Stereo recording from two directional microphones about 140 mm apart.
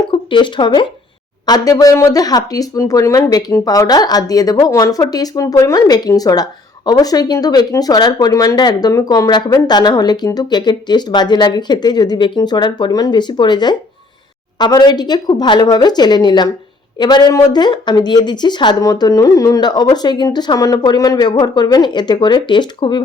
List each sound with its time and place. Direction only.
0.1 s a woman's voice: 35° left (ahead or behind)